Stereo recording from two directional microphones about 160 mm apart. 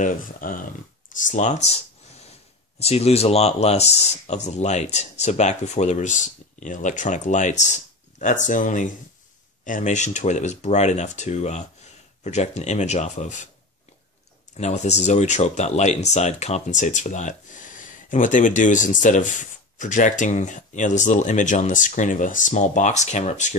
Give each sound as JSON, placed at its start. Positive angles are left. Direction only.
{"t": 0.0, "sound": "speech", "side_deg": 60}
{"t": 2.8, "sound": "speech", "side_deg": 40}
{"t": 14.6, "sound": "speech", "side_deg": 45}